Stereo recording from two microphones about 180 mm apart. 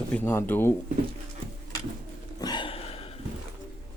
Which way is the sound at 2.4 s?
25° left (ahead or behind).